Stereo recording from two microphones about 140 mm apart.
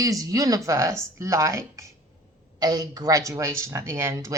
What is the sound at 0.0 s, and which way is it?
Speech, 25° right (ahead or behind).